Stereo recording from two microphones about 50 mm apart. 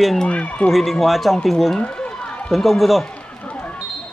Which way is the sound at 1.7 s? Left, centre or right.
Centre.